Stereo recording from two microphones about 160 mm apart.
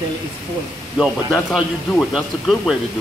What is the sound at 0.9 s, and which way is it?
Speech, 5° right (ahead or behind).